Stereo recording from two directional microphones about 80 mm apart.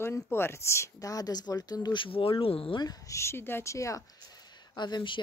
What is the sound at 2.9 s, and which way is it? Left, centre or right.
Speech, left.